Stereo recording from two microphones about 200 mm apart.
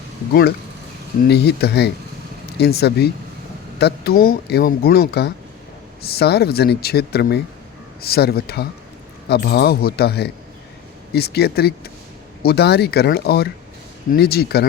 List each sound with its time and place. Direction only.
1.3 s speech: 55° left (ahead or behind)